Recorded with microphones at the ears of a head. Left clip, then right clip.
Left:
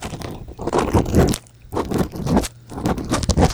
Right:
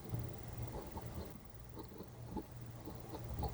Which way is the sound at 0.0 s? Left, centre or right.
Left.